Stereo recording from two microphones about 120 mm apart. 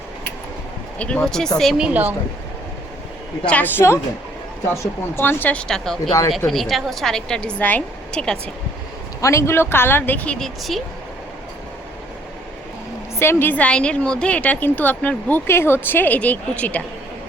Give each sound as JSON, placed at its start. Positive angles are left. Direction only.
{"t": 0.9, "sound": "a woman's voice", "side_deg": 10}
{"t": 1.8, "sound": "speech", "side_deg": -15}
{"t": 3.4, "sound": "a woman's voice", "side_deg": 10}
{"t": 9.2, "sound": "a woman's voice", "side_deg": 25}
{"t": 13.1, "sound": "a woman's voice", "side_deg": 20}